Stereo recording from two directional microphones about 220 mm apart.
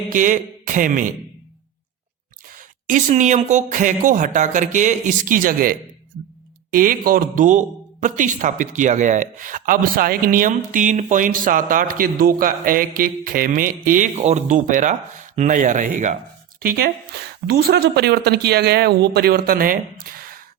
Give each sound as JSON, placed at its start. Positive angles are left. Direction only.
{"t": 0.1, "sound": "speech", "side_deg": -35}
{"t": 2.6, "sound": "speech", "side_deg": -35}
{"t": 17.4, "sound": "a man's voice", "side_deg": -45}